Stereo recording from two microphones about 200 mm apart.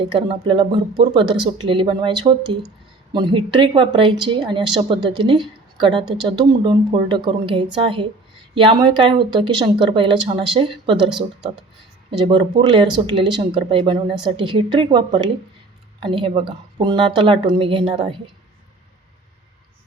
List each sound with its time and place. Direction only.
0.0 s speech: 25° right (ahead or behind)
12.2 s speech: 25° right (ahead or behind)